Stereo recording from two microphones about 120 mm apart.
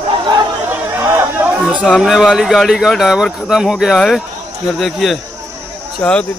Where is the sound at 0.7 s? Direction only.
20° right (ahead or behind).